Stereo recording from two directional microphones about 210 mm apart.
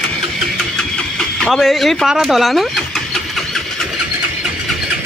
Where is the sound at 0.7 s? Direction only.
5° left (ahead or behind).